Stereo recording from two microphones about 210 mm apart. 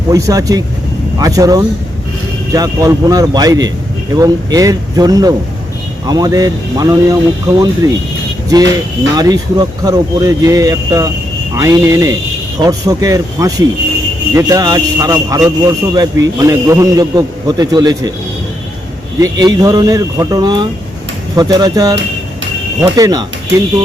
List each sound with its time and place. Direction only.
0.1 s speech: 15° right (ahead or behind)
19.2 s speech: 20° right (ahead or behind)